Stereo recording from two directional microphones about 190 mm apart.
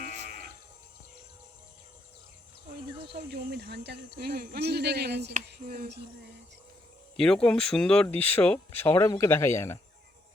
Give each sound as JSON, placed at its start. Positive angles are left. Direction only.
{"t": 0.0, "sound": "moo", "side_deg": -40}
{"t": 3.1, "sound": "speech", "side_deg": -60}
{"t": 5.6, "sound": "speech", "side_deg": -45}
{"t": 7.2, "sound": "speech", "side_deg": 5}